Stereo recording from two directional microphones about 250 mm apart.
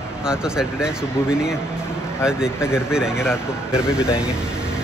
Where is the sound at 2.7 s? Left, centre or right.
Centre.